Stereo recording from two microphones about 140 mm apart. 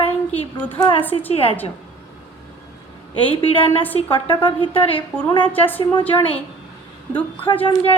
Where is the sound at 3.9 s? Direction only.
40° left (ahead or behind).